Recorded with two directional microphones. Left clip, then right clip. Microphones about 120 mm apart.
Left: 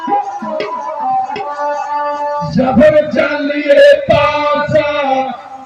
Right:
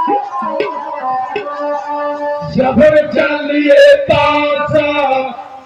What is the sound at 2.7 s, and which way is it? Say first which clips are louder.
Music: left 1 dB; 5° right (ahead or behind).